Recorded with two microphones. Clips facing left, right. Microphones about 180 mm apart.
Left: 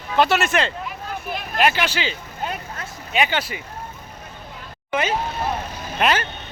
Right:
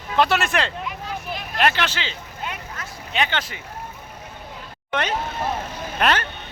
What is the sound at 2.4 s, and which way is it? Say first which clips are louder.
Vehicle: left 4 dB; 35° left (ahead or behind).